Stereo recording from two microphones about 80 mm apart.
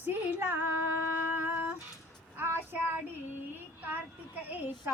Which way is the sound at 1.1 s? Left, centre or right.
Right.